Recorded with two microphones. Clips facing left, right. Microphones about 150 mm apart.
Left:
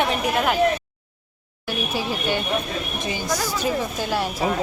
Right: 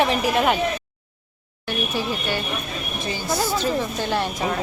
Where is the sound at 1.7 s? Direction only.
15° left (ahead or behind).